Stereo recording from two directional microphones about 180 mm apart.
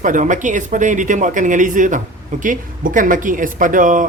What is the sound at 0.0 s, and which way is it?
Speech, 45° right (ahead or behind).